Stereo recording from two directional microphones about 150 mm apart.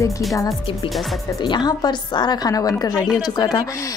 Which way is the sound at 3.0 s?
Centre (ahead or behind).